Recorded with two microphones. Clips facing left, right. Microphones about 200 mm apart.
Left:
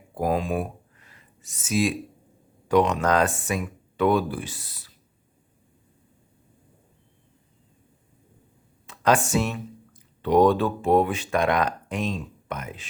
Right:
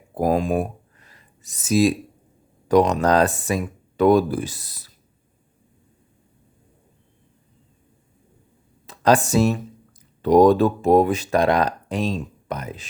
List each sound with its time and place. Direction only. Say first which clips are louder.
0.1 s a sound: right 5 dB; 40° right (ahead or behind)
2.6 s speech: right 4 dB; 40° right (ahead or behind)
8.9 s speech: right 4 dB; 35° right (ahead or behind)